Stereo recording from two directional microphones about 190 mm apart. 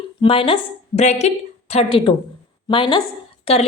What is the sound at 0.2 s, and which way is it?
A woman's voice, 30° left (ahead or behind).